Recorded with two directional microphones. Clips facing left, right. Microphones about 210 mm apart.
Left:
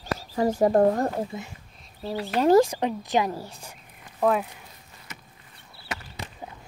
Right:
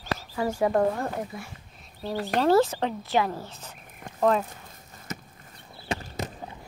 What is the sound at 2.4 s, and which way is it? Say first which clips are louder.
A woman's voice: left 3 dB; 15° left (ahead or behind).